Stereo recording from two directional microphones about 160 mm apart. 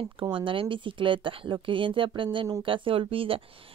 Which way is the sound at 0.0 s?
30° right (ahead or behind).